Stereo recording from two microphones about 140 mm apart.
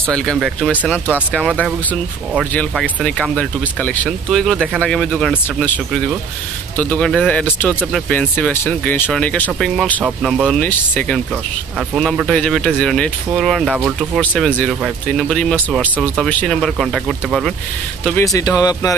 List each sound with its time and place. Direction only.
0.1 s speech: 5° left (ahead or behind)
2.7 s speech: 5° left (ahead or behind)
6.8 s speech: 10° left (ahead or behind)
10.6 s speech: 10° left (ahead or behind)
13.7 s speech: 10° right (ahead or behind)
14.4 s speech: 5° left (ahead or behind)
18.2 s speech: 25° left (ahead or behind)